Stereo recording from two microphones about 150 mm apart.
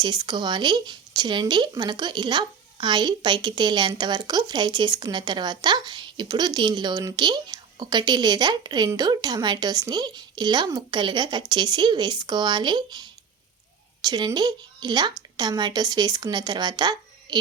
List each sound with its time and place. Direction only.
0.0 s speech: 30° right (ahead or behind)